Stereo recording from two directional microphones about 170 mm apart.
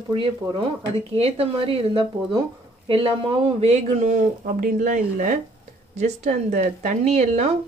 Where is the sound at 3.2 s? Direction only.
30° right (ahead or behind).